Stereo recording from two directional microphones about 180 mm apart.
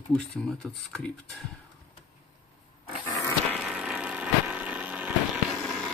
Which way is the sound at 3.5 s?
5° right (ahead or behind).